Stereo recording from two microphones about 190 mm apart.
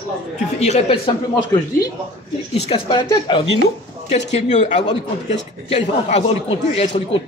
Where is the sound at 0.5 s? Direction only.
35° left (ahead or behind).